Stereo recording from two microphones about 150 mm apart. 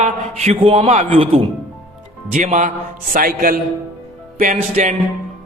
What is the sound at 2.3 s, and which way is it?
Speech, 55° right (ahead or behind).